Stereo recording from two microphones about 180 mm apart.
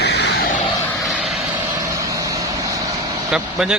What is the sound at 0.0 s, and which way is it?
Vehicle, 70° left (ahead or behind).